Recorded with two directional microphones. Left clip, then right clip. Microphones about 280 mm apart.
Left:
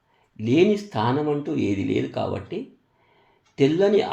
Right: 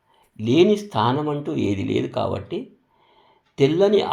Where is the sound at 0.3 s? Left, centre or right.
Right.